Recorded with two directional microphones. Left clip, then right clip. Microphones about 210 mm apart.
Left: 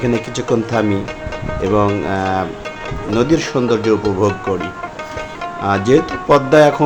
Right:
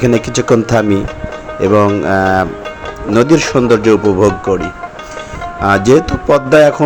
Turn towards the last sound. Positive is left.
turn(degrees=-15)  # may be behind; listen again after turning